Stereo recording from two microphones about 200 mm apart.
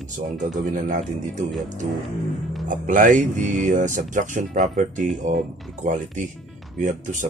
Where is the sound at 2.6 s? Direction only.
40° right (ahead or behind).